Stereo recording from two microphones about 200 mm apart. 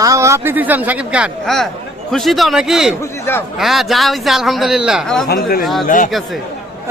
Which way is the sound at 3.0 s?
10° left (ahead or behind).